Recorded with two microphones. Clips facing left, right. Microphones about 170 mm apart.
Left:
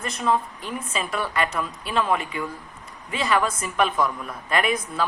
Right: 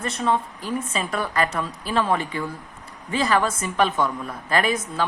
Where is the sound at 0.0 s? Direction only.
30° right (ahead or behind).